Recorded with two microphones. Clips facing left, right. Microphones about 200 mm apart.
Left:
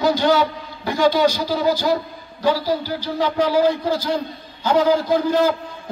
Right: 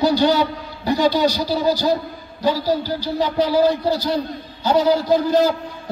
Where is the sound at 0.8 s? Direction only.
40° right (ahead or behind).